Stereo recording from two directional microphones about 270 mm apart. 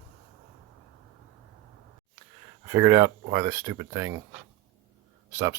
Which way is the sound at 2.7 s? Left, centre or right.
Centre.